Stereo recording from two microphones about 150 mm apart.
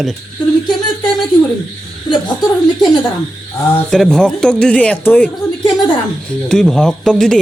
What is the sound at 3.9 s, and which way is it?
Speech, 5° left (ahead or behind).